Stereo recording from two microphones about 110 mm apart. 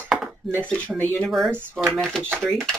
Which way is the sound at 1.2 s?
Centre (ahead or behind).